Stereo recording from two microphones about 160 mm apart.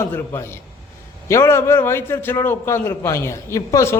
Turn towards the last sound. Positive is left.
turn(degrees=20)  # may be behind; listen again after turning